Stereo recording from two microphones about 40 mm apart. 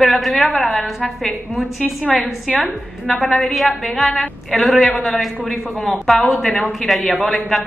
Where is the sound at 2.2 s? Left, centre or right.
Left.